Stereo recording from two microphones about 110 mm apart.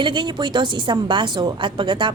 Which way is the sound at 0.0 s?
45° right (ahead or behind).